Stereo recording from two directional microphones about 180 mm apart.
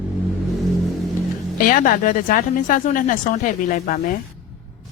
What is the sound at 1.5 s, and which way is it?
Speech, 50° left (ahead or behind).